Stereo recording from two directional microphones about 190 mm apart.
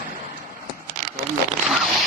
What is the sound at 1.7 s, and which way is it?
Zipper, centre (ahead or behind).